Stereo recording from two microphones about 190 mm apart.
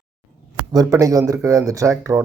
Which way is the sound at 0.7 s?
15° right (ahead or behind).